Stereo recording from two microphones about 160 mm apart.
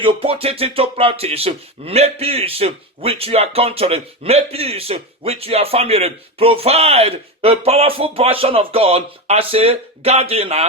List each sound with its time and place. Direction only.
0.0 s speech: 35° right (ahead or behind)